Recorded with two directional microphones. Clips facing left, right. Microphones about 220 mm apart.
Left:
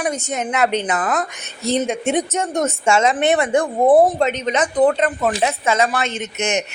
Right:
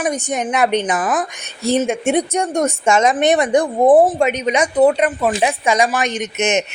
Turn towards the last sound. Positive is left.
turn(degrees=-20)  # may be behind; listen again after turning